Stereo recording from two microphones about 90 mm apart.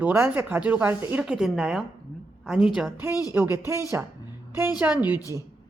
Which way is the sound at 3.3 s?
20° right (ahead or behind).